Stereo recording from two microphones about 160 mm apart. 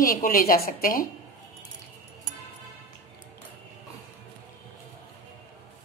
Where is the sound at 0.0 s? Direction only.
60° left (ahead or behind).